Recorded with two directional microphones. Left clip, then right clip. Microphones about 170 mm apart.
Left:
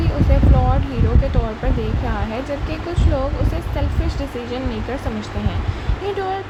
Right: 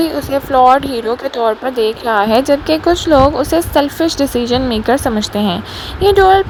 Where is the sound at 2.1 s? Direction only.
60° right (ahead or behind).